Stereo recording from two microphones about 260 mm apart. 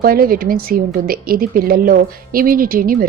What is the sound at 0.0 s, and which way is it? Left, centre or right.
A woman's voice, right.